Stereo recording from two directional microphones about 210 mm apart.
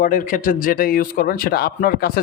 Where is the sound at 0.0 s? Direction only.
40° left (ahead or behind).